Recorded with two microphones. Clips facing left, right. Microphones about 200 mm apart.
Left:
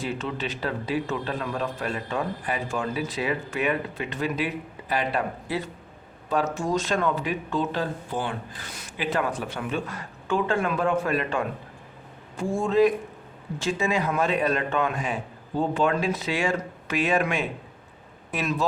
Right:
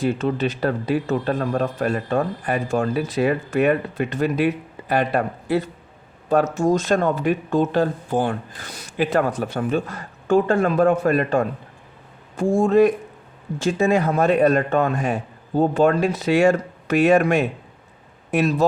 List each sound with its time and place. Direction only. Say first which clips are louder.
0.0 s speech: right 9 dB; 45° right (ahead or behind)